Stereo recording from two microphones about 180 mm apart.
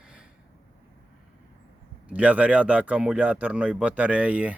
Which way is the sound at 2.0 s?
5° right (ahead or behind).